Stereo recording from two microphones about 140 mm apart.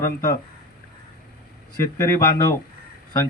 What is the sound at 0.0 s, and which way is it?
Speech, 25° left (ahead or behind).